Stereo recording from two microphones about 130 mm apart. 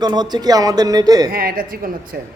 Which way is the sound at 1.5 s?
90° right.